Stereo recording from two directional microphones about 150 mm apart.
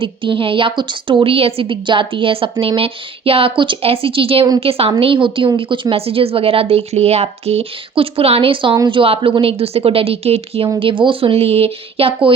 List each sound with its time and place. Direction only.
0.0 s a woman's voice: 35° right (ahead or behind)